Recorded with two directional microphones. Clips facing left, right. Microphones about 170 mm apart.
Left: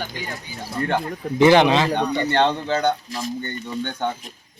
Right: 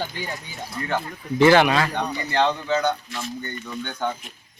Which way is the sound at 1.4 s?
15° left (ahead or behind).